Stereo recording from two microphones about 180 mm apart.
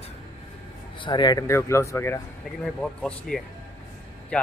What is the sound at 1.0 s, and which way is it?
Speech, 25° left (ahead or behind).